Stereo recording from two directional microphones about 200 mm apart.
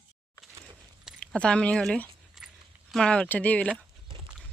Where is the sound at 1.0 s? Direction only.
5° left (ahead or behind).